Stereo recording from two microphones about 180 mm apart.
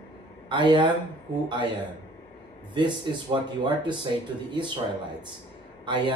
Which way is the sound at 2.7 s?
25° right (ahead or behind).